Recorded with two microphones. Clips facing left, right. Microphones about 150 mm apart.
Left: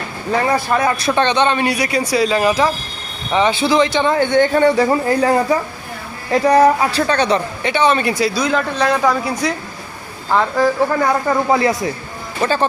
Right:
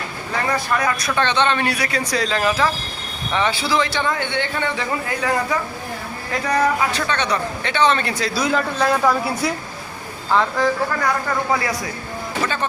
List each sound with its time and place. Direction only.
0.7 s speech: 30° left (ahead or behind)
4.1 s speech: 40° left (ahead or behind)
7.6 s speech: 10° left (ahead or behind)
8.4 s a man's voice: 5° right (ahead or behind)
10.6 s a man's voice: 5° left (ahead or behind)
11.0 s speech: 25° left (ahead or behind)